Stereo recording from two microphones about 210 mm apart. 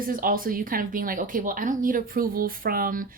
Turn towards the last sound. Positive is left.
turn(degrees=-40)  # may be behind; listen again after turning